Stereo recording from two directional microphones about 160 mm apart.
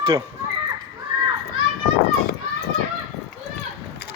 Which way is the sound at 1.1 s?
25° right (ahead or behind).